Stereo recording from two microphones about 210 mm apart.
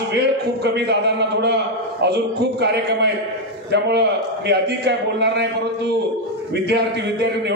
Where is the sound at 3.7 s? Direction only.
55° right (ahead or behind).